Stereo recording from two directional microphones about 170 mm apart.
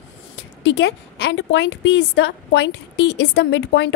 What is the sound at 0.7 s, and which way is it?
A woman's voice, 90° left.